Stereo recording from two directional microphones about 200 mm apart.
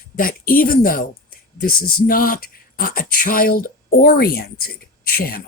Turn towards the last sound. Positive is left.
turn(degrees=50)  # may be behind; listen again after turning